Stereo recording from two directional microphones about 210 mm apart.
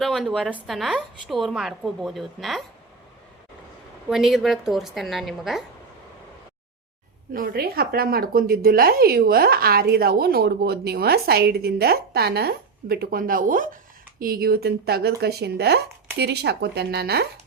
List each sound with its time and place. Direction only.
0.0 s a woman's voice: centre (ahead or behind)
4.1 s a woman's voice: centre (ahead or behind)
7.3 s a woman's voice: 45° right (ahead or behind)